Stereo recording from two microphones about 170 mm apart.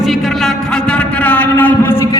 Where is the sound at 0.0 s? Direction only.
Centre (ahead or behind).